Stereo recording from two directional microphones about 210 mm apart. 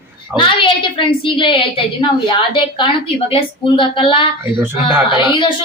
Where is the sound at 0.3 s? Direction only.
25° left (ahead or behind).